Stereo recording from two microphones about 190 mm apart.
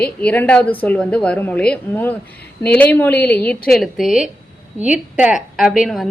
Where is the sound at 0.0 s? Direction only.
5° left (ahead or behind).